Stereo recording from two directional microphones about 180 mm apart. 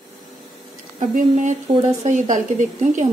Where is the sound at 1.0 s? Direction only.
45° right (ahead or behind).